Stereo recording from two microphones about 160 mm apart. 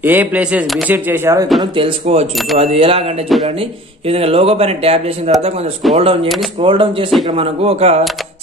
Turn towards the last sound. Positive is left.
turn(degrees=-40)  # may be behind; listen again after turning